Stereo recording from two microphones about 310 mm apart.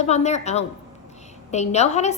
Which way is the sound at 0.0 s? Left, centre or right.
Left.